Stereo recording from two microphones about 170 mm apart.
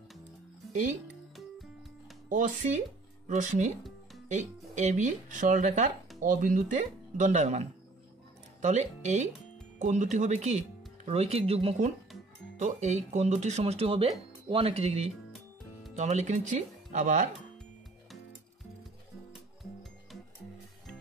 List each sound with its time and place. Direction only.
2.2 s speech: 50° right (ahead or behind)